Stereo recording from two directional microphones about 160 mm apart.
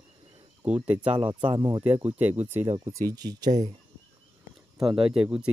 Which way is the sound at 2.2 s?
45° right (ahead or behind).